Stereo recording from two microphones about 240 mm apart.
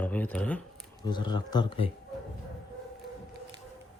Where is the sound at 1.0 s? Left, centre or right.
Centre.